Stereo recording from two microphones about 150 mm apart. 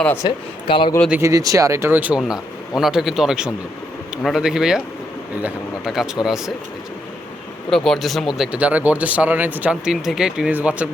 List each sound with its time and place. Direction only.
0.0 s speech: 15° left (ahead or behind)
0.3 s speech: 30° left (ahead or behind)
1.1 s speech: 20° right (ahead or behind); by 6.5 s 5° right (ahead or behind)
7.7 s speech: centre (ahead or behind)